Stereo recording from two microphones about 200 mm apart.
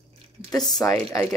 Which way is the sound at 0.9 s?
15° left (ahead or behind).